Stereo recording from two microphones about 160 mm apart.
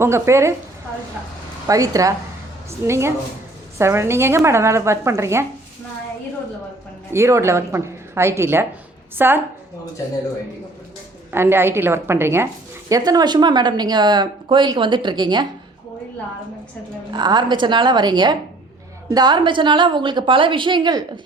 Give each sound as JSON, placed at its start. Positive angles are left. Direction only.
{"t": 0.0, "sound": "speech", "side_deg": -15}
{"t": 1.6, "sound": "speech", "side_deg": -20}
{"t": 7.1, "sound": "speech", "side_deg": -15}
{"t": 11.3, "sound": "speech", "side_deg": -15}
{"t": 17.1, "sound": "speech", "side_deg": -25}